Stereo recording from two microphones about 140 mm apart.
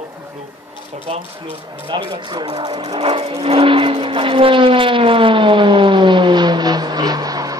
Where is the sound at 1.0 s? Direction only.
40° right (ahead or behind).